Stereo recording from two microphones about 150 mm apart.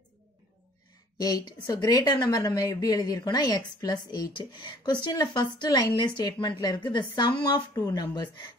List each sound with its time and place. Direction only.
1.2 s a woman's voice: 25° left (ahead or behind)